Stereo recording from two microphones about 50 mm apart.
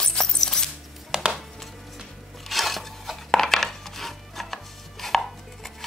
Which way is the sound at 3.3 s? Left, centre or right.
Centre.